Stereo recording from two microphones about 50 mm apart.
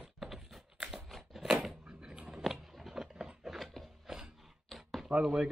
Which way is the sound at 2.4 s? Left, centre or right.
Centre.